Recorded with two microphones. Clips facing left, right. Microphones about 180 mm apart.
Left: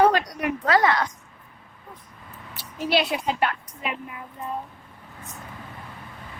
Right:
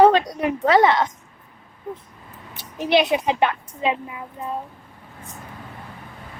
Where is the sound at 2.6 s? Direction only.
20° right (ahead or behind).